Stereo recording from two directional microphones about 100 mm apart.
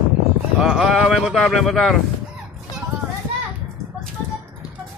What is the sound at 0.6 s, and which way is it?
Speech, centre (ahead or behind).